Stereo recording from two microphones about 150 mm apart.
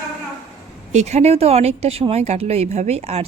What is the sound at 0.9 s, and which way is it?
Speech, 50° right (ahead or behind).